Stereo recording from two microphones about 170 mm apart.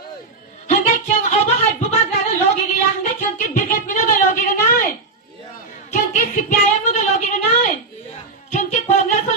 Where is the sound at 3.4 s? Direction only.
50° left (ahead or behind).